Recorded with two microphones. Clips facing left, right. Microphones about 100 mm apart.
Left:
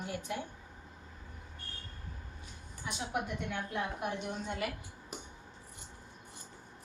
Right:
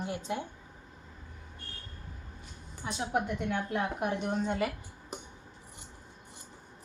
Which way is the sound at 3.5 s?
50° right (ahead or behind).